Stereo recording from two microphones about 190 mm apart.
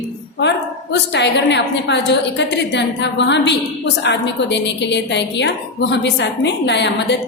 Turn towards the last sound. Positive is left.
turn(degrees=65)  # may be behind; listen again after turning